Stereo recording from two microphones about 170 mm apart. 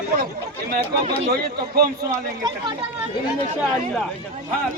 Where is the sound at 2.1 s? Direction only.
25° right (ahead or behind).